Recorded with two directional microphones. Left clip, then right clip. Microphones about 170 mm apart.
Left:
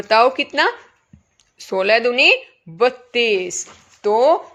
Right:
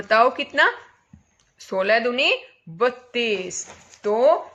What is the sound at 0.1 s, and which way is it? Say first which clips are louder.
Speech: left 3 dB; 35° left (ahead or behind).